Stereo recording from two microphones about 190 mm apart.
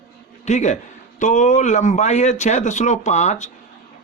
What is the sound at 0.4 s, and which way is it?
Speech, 35° left (ahead or behind).